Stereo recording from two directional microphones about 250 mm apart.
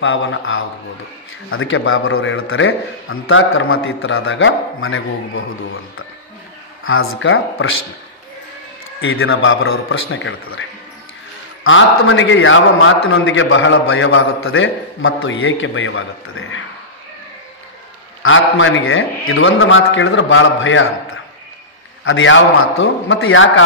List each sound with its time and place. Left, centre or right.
0.0 s a man's voice: left
6.8 s speech: left
9.0 s a man's voice: left
11.6 s a man's voice: left
18.2 s a man's voice: left